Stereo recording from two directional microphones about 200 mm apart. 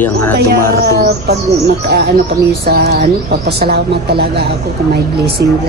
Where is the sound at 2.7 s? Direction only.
50° right (ahead or behind).